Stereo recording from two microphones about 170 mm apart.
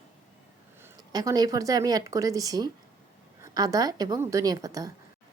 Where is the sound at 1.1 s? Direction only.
20° right (ahead or behind).